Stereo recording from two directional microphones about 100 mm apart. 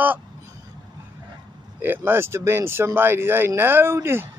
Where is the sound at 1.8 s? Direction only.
20° right (ahead or behind).